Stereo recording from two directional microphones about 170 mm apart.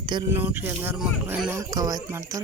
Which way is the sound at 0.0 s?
25° right (ahead or behind).